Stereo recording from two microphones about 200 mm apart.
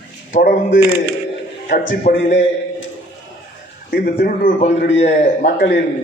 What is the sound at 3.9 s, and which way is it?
Speech, 50° left (ahead or behind).